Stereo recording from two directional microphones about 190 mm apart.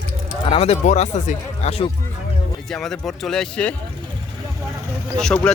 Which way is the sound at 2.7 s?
Centre (ahead or behind).